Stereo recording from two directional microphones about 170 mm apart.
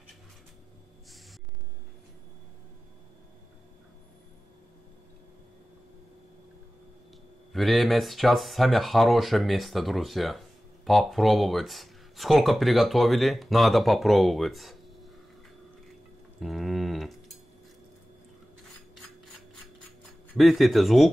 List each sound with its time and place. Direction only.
7.5 s speech: centre (ahead or behind)
16.3 s a sound: centre (ahead or behind)
20.3 s speech: centre (ahead or behind)